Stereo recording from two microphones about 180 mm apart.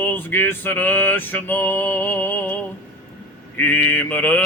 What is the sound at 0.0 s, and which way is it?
Male singing, 10° left (ahead or behind).